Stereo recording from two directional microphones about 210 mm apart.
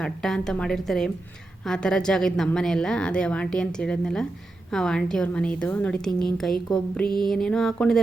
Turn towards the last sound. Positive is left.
turn(degrees=0)  # may be behind; listen again after turning